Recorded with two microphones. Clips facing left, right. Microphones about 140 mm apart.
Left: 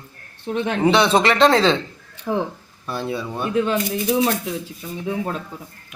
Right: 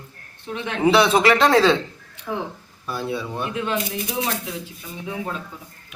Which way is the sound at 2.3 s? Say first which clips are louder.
Left 5 dB; 45° left (ahead or behind).